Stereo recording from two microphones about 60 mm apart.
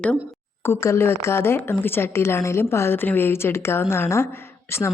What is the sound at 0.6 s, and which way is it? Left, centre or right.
A woman's voice, left.